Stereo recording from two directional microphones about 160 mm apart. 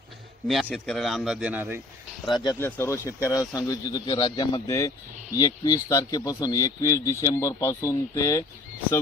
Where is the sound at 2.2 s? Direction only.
25° left (ahead or behind).